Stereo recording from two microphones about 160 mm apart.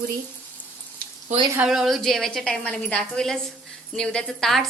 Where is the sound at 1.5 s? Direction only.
5° right (ahead or behind).